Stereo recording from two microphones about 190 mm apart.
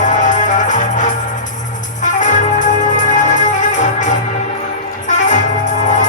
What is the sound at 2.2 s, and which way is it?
Music, 40° left (ahead or behind).